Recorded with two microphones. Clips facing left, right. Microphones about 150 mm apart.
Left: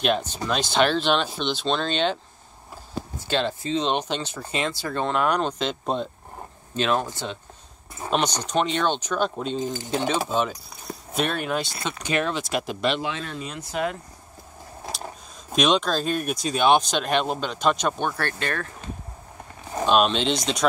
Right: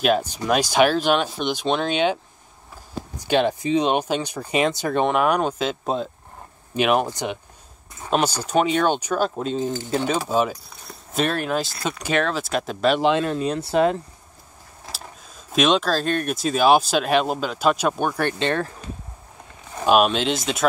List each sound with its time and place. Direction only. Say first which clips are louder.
0.0 s speech: right 4 dB; 10° right (ahead or behind)
3.2 s speech: right 6 dB; 15° right (ahead or behind)
6.7 s speech: right 4 dB; 15° right (ahead or behind)
8.1 s speech: right 3 dB; 5° right (ahead or behind)
13.3 s speech: right 10 dB; 35° right (ahead or behind)
15.5 s speech: right 2 dB; centre (ahead or behind); by 18.7 s 25° right (ahead or behind)
19.9 s speech: right 3 dB; 5° right (ahead or behind)